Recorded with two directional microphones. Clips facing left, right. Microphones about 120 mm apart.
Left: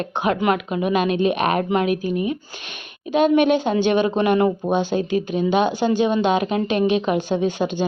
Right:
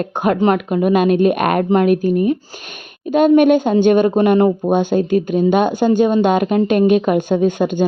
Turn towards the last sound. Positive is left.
turn(degrees=-50)  # may be behind; listen again after turning